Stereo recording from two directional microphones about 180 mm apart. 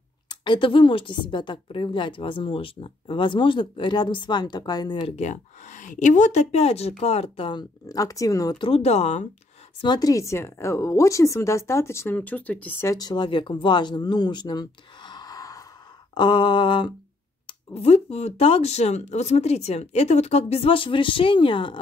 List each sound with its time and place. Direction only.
0.3 s a woman's voice: 25° left (ahead or behind)
9.8 s a woman's voice: 25° left (ahead or behind)